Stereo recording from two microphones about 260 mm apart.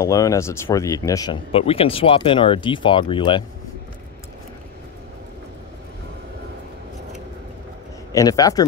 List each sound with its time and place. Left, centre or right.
0.0 s speech: centre
8.1 s speech: centre